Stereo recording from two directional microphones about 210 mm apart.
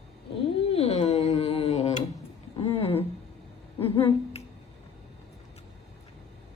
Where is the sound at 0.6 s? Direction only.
25° left (ahead or behind).